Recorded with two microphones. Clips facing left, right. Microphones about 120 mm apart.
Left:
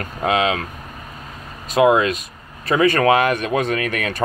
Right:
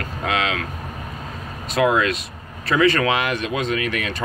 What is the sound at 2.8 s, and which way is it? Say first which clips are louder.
Speech: left 4 dB; 40° left (ahead or behind).